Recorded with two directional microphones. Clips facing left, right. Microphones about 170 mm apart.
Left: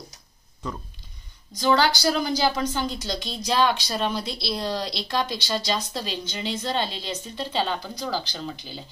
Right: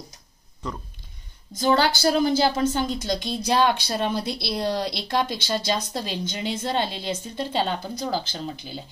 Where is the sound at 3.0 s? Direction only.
50° right (ahead or behind).